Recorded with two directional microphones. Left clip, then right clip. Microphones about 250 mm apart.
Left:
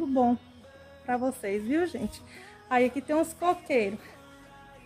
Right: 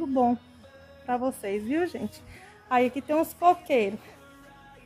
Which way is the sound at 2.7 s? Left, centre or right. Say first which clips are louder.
Right 1 dB; centre.